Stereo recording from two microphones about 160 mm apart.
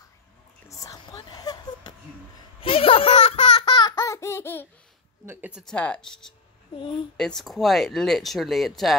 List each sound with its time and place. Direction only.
0.7 s whispering: 20° left (ahead or behind)
2.6 s a sound: 35° left (ahead or behind)
3.9 s baby laughter: 20° left (ahead or behind)
5.2 s a woman's voice: 10° right (ahead or behind)
5.7 s speech: 5° left (ahead or behind)
6.8 s speech: 30° left (ahead or behind)
7.2 s speech: 5° left (ahead or behind)